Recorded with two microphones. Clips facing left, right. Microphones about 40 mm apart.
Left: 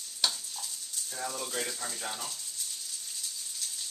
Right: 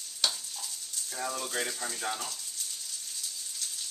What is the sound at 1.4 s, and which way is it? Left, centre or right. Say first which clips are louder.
Speech: right 2 dB; centre.